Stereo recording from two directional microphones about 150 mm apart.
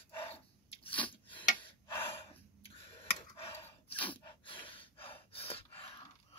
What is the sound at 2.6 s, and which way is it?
Tick, 40° left (ahead or behind).